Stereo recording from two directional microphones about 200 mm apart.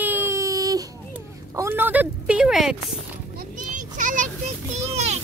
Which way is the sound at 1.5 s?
10° right (ahead or behind).